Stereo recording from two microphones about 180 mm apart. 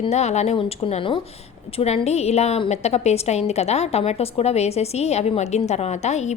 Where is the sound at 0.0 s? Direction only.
40° left (ahead or behind).